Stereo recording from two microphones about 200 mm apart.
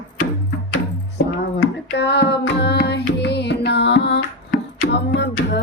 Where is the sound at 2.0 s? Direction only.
60° left (ahead or behind).